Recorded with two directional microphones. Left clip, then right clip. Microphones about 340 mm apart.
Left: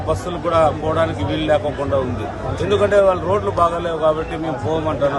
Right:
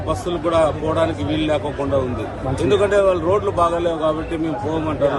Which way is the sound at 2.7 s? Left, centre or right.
Centre.